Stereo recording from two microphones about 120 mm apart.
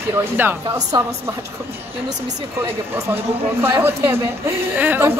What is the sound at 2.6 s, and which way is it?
Speech, 20° right (ahead or behind).